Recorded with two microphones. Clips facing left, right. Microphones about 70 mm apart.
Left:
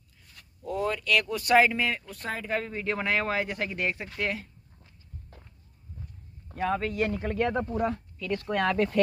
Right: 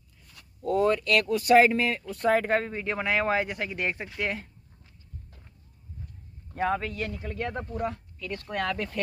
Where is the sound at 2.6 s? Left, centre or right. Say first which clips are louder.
Even; centre.